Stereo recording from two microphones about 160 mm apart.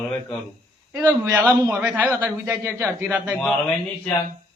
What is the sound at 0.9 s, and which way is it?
A man's voice, 10° right (ahead or behind).